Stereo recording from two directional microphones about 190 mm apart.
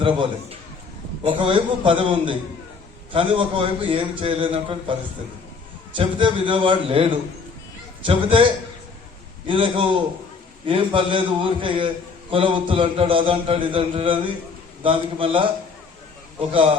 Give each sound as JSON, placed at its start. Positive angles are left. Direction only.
{"t": 0.0, "sound": "a man's voice", "side_deg": -25}
{"t": 6.0, "sound": "a man's voice", "side_deg": -25}
{"t": 9.5, "sound": "a man's voice", "side_deg": -30}